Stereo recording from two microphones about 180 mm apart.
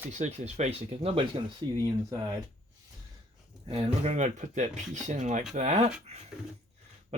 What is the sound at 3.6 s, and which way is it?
Speech, 35° right (ahead or behind).